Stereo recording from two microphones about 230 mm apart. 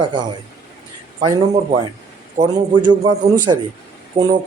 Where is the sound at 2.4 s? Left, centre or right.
Centre.